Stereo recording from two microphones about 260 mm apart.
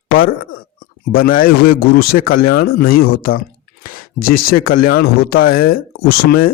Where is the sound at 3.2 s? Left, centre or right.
Left.